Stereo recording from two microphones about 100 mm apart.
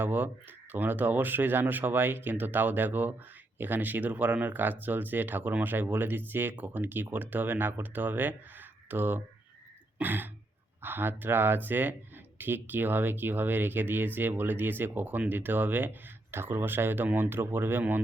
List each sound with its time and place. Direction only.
0.0 s speech: 20° right (ahead or behind)